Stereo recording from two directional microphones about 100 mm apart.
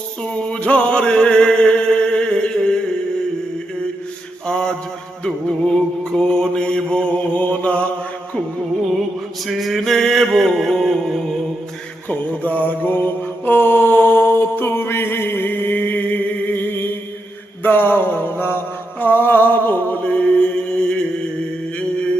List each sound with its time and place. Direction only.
0.2 s music: 10° left (ahead or behind)
4.4 s mantra: 5° left (ahead or behind)
5.2 s music: 10° left (ahead or behind)
6.1 s mantra: 10° left (ahead or behind)
9.5 s mantra: centre (ahead or behind)
12.0 s mantra: 15° left (ahead or behind)
21.8 s mantra: 10° left (ahead or behind)